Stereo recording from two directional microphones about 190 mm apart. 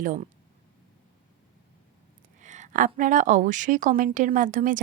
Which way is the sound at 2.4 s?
40° right (ahead or behind).